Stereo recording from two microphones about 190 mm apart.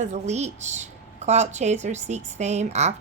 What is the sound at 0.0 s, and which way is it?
A woman's voice, 35° right (ahead or behind).